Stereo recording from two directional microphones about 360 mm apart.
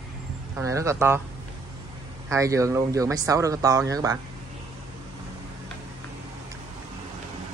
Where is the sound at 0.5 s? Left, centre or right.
Centre.